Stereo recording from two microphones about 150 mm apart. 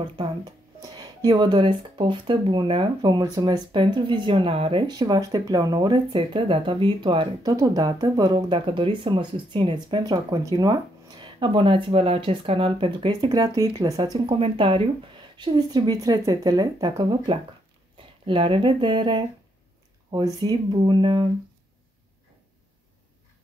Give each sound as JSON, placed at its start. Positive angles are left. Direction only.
{"t": 0.7, "sound": "speech", "side_deg": -25}
{"t": 20.4, "sound": "speech", "side_deg": -30}